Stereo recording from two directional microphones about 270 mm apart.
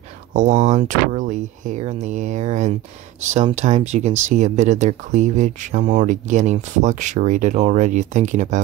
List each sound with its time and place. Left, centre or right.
0.3 s speech: right